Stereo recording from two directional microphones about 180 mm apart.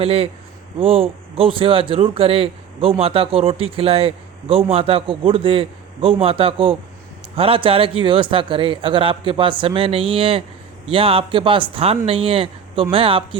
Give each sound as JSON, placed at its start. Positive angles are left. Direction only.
{"t": 0.0, "sound": "speech", "side_deg": -35}